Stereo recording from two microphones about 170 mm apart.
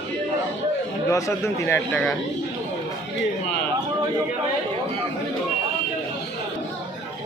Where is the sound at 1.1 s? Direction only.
15° left (ahead or behind).